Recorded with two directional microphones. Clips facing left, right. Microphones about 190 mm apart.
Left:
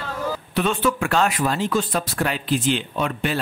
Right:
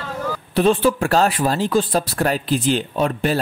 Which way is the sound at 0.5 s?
35° right (ahead or behind).